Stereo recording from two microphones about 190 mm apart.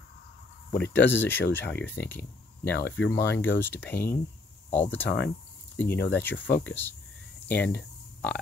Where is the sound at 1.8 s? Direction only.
10° left (ahead or behind).